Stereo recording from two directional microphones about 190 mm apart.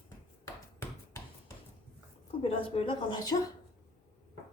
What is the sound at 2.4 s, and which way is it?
Speech, 30° left (ahead or behind).